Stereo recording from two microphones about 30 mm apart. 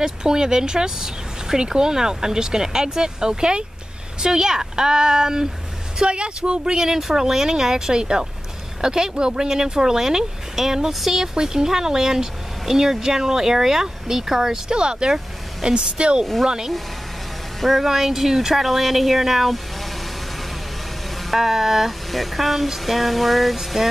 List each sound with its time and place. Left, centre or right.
0.0 s speech: right
5.9 s speech: right
6.9 s speech: centre
9.1 s speech: right
14.8 s speech: right
16.4 s speech: centre
21.3 s speech: centre